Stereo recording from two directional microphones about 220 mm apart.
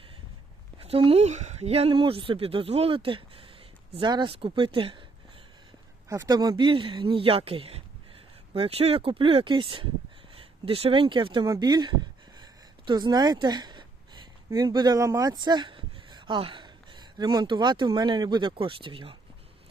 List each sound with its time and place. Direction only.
0.8 s speech: 25° right (ahead or behind)
6.1 s speech: 15° right (ahead or behind)